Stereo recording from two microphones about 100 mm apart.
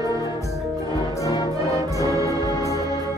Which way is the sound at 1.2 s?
40° left (ahead or behind).